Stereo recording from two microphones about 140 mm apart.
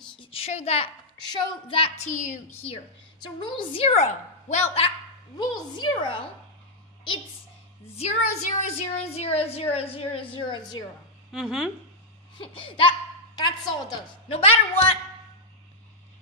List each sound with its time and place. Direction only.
0.2 s a woman's voice: 45° left (ahead or behind)
1.2 s a woman's voice: 30° left (ahead or behind)
2.0 s a woman's voice: 65° left (ahead or behind)
2.6 s a woman's voice: 40° left (ahead or behind)
5.4 s a woman's voice: 30° left (ahead or behind)
8.0 s a woman's voice: 50° left (ahead or behind); by 10.9 s 30° left (ahead or behind)
11.3 s speech: 5° right (ahead or behind)
12.4 s a woman's voice: 40° left (ahead or behind)
14.3 s a woman's voice: 45° left (ahead or behind)